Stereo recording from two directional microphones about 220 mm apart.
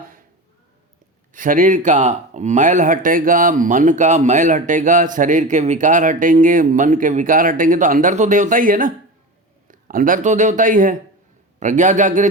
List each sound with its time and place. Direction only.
1.3 s speech: 40° right (ahead or behind)